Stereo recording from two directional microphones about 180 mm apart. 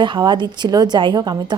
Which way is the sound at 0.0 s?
25° right (ahead or behind).